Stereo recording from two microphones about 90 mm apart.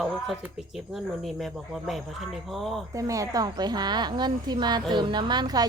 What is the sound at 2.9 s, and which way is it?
Speech, 40° right (ahead or behind).